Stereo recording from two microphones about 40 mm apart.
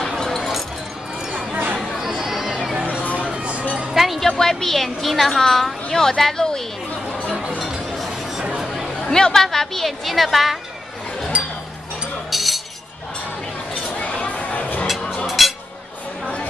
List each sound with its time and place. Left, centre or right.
0.2 s a sound: centre
1.3 s a sound: right
1.8 s chatter: centre
2.2 s music: centre
2.7 s a sound: right
3.9 s music: centre
4.2 s a woman's voice: centre
9.0 s a woman's voice: centre
11.3 s chink: right
12.3 s chink: centre
13.8 s a sound: left
15.2 s music: centre